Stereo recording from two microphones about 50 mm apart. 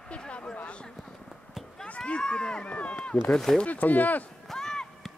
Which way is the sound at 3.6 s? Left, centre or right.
Left.